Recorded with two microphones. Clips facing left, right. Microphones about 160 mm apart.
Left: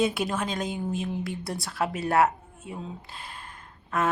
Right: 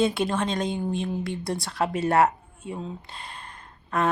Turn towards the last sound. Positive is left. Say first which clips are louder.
# right 2 dB
turn(degrees=0)  # may be behind; listen again after turning